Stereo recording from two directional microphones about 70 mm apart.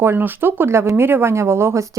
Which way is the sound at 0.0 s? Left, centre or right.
Right.